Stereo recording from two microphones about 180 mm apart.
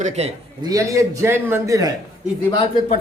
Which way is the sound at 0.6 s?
20° right (ahead or behind).